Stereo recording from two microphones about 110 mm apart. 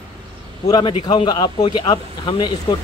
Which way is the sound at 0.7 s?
40° left (ahead or behind).